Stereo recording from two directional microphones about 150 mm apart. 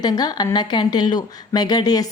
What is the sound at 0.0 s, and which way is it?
Speech, 25° left (ahead or behind).